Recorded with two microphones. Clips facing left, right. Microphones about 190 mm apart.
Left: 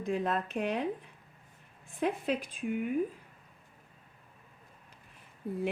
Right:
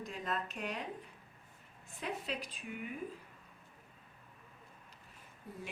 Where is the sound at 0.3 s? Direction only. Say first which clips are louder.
Left 8 dB; 45° left (ahead or behind).